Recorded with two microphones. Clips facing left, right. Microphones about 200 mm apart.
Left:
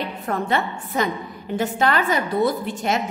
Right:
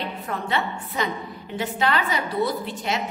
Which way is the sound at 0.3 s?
50° left (ahead or behind).